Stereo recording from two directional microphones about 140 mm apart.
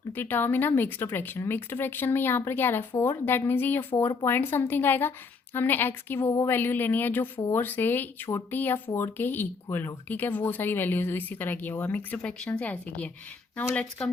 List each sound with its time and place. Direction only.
0.1 s speech: 15° left (ahead or behind)